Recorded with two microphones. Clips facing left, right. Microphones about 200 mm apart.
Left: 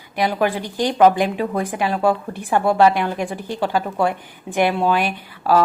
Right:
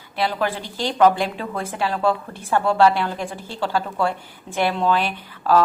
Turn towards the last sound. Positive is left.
turn(degrees=10)  # may be behind; listen again after turning